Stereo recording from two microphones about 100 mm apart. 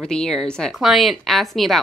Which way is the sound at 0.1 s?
5° left (ahead or behind).